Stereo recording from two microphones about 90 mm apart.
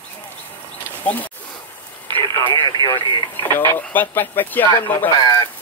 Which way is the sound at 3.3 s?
25° left (ahead or behind).